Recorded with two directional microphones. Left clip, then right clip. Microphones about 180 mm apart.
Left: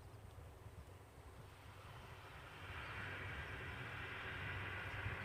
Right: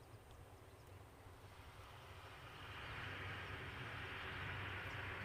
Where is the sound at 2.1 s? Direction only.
10° right (ahead or behind).